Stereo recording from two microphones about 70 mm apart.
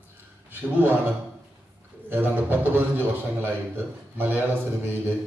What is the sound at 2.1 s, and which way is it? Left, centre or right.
A man's voice, right.